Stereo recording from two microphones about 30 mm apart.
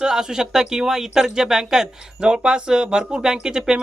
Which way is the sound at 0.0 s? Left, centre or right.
Right.